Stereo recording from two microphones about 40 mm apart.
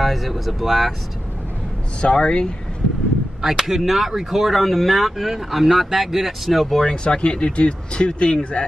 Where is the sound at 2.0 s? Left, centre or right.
Left.